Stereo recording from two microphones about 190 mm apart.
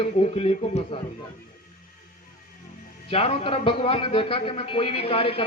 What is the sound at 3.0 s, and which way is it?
A man's voice, 30° left (ahead or behind).